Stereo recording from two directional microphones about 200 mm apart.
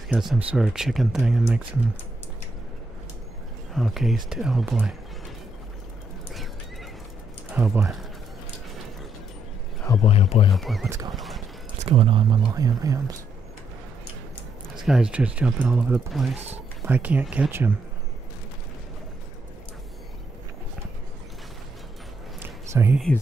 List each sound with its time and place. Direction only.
0.1 s speech: centre (ahead or behind)
3.7 s speech: centre (ahead or behind)
7.5 s speech: 10° right (ahead or behind)
9.9 s speech: 20° left (ahead or behind)
10.5 s speech: centre (ahead or behind)
10.9 s speech: 15° right (ahead or behind)
11.1 s a sound: centre (ahead or behind)
11.8 s speech: 30° right (ahead or behind)
14.8 s speech: 5° right (ahead or behind)
22.4 s a sound: 10° right (ahead or behind)